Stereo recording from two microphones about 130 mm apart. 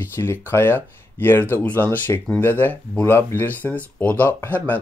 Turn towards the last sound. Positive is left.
turn(degrees=15)  # may be behind; listen again after turning